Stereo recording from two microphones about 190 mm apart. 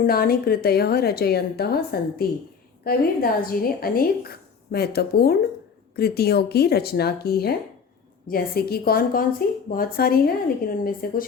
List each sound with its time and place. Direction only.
0.0 s a woman's voice: 50° left (ahead or behind)